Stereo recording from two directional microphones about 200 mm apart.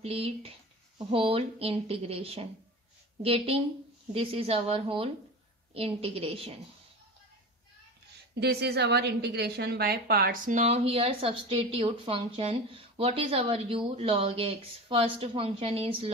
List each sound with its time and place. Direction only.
0.0 s a woman's voice: 30° right (ahead or behind)
8.4 s a woman's voice: 55° right (ahead or behind); by 16.1 s 30° right (ahead or behind)